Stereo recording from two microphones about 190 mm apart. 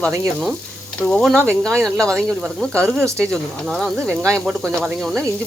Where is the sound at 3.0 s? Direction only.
15° right (ahead or behind).